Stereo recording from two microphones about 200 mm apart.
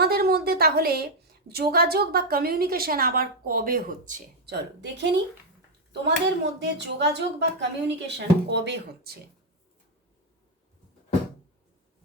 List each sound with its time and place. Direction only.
0.0 s a woman's voice: 50° right (ahead or behind)
4.5 s speech: 60° right (ahead or behind)